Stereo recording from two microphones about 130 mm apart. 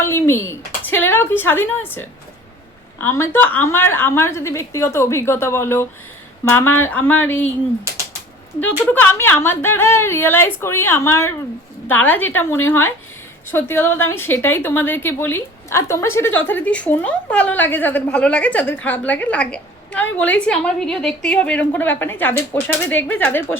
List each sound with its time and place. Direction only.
0.0 s a woman's voice: 20° left (ahead or behind)
8.9 s a woman's voice: 15° left (ahead or behind)